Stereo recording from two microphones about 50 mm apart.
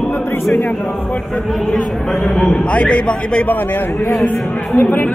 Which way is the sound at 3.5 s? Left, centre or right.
Left.